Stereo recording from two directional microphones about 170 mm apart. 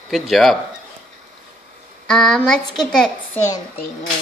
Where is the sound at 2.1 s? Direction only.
5° left (ahead or behind).